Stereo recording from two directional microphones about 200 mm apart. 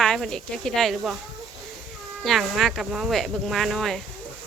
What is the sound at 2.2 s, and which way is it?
Speech, centre (ahead or behind).